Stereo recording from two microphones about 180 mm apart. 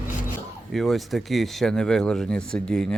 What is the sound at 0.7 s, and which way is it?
Speech, centre (ahead or behind).